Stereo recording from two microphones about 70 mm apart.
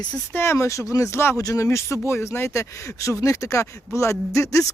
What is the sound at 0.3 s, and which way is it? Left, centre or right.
Speech, left.